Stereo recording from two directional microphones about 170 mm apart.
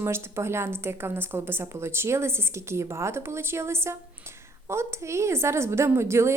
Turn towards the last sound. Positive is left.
turn(degrees=-15)  # may be behind; listen again after turning